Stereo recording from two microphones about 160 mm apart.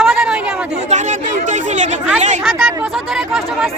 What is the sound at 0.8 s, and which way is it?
Speech, 50° right (ahead or behind).